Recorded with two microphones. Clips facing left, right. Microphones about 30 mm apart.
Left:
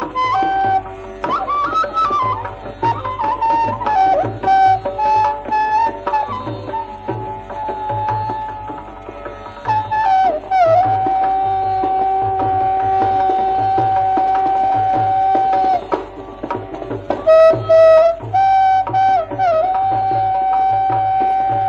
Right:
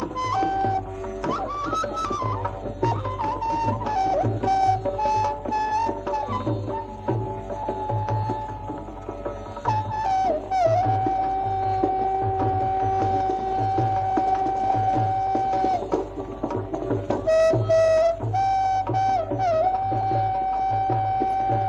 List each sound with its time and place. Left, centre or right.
0.0 s music: left
6.2 s music: left
7.6 s music: left
9.8 s music: left
11.6 s music: left
11.9 s music: left
19.7 s music: left
20.0 s music: left
20.4 s music: left
20.7 s music: left